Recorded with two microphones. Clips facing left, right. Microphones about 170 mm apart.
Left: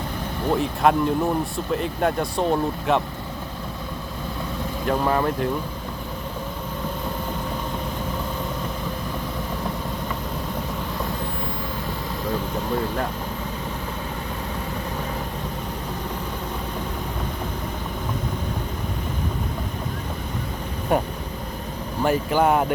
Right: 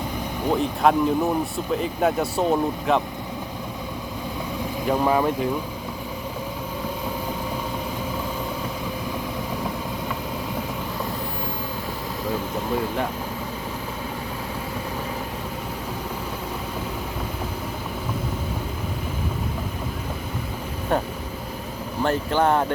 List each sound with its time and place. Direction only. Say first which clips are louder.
0.5 s speech: even; centre (ahead or behind)
4.9 s speech: right 1 dB; 10° right (ahead or behind)
20.9 s speech: left 2 dB; 10° left (ahead or behind)